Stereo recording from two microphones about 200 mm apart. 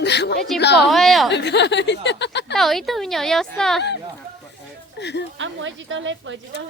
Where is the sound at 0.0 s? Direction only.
60° left (ahead or behind).